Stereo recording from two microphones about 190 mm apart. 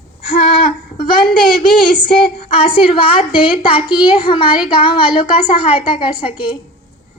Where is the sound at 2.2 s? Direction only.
30° left (ahead or behind).